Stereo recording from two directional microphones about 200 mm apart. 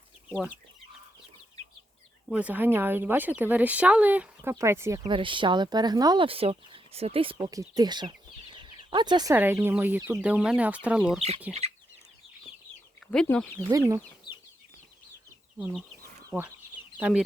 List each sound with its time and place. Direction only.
2.3 s speech: 10° right (ahead or behind)
11.5 s chicken: 5° right (ahead or behind)
13.1 s speech: 5° left (ahead or behind)
13.7 s speech: 15° right (ahead or behind)
15.5 s speech: 5° right (ahead or behind)
17.0 s speech: 5° right (ahead or behind)